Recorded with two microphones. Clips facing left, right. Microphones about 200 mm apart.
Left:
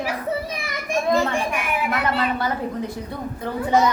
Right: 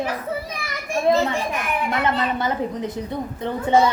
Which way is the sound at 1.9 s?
20° right (ahead or behind).